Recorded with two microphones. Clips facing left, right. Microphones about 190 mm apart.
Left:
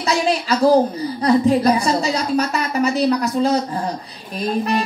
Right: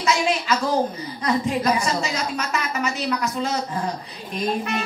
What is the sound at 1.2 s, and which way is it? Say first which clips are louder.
Music: left 7 dB; 35° left (ahead or behind).